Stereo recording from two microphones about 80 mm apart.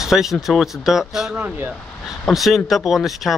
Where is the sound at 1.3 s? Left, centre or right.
Right.